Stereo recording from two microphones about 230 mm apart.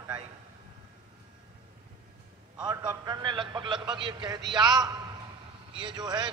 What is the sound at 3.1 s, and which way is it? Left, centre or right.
A man's voice, centre.